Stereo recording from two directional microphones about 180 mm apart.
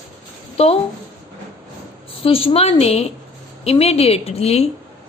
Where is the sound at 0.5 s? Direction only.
35° left (ahead or behind).